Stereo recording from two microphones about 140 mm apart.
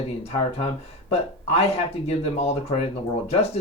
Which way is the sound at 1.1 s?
45° left (ahead or behind).